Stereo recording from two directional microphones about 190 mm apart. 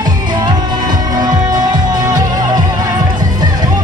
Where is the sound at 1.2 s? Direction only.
20° right (ahead or behind).